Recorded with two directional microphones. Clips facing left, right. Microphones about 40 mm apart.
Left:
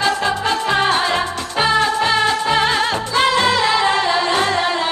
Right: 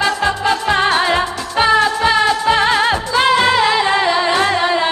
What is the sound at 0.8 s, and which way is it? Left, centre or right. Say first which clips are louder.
Music: right 2 dB; right.